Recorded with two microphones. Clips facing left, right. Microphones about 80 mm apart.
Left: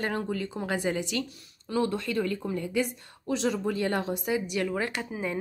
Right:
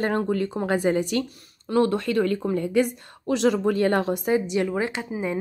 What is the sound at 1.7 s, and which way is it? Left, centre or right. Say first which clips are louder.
A woman's voice: right 7 dB; right.